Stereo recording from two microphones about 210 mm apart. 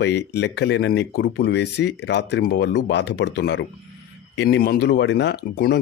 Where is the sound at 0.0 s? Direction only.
55° left (ahead or behind).